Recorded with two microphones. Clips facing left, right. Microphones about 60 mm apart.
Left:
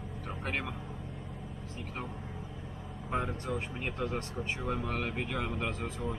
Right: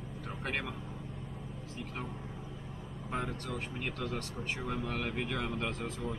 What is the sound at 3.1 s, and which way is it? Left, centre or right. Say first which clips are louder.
Speech: left 3 dB; centre.